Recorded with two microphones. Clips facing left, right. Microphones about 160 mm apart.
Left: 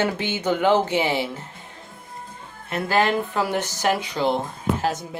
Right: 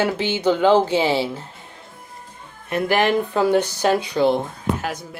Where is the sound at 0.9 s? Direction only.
30° right (ahead or behind).